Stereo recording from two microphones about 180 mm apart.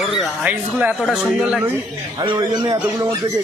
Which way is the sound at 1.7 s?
20° right (ahead or behind).